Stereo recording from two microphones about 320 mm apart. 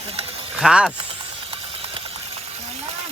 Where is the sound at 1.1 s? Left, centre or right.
Centre.